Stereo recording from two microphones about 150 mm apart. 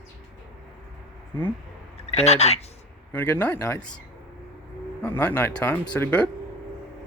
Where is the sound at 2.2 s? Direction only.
45° left (ahead or behind).